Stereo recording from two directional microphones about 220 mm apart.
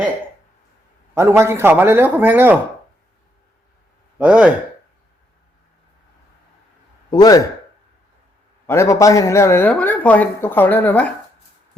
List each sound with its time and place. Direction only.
1.1 s a man's voice: 10° right (ahead or behind)
4.2 s a man's voice: 5° right (ahead or behind)
7.1 s speech: 15° left (ahead or behind)
8.6 s speech: 10° left (ahead or behind)